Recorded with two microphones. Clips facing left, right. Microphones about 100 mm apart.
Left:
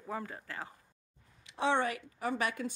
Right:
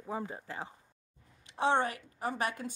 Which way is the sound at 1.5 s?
45° right (ahead or behind).